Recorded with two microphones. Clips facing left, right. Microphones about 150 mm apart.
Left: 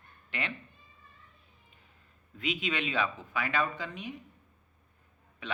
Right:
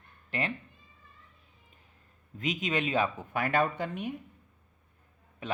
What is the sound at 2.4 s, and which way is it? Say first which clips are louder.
Speech: right 2 dB; 40° right (ahead or behind).